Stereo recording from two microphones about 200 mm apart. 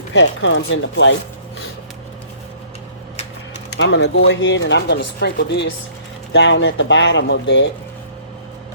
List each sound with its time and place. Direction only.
0.1 s speech: 65° left (ahead or behind)
3.8 s speech: 65° left (ahead or behind)